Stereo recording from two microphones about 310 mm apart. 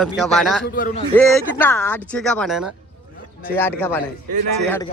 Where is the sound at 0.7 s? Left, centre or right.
Left.